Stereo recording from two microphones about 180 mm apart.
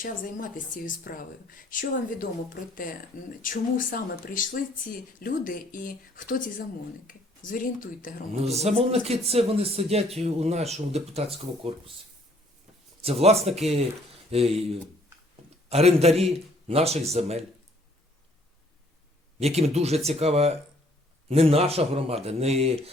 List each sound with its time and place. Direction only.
0.0 s speech: 50° left (ahead or behind)
8.6 s speech: 35° right (ahead or behind)
13.0 s speech: 35° right (ahead or behind)
15.7 s speech: 35° right (ahead or behind)
19.4 s speech: 35° right (ahead or behind)